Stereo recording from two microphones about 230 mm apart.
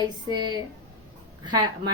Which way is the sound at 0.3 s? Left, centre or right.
Centre.